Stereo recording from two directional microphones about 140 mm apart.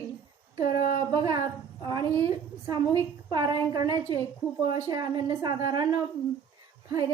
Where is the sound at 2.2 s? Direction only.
30° right (ahead or behind).